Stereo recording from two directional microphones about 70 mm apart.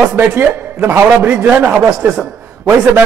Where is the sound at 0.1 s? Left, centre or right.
Right.